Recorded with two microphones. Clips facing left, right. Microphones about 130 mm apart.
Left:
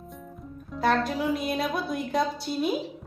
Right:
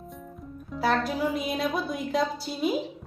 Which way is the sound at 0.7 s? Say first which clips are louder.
Left 1 dB; centre (ahead or behind).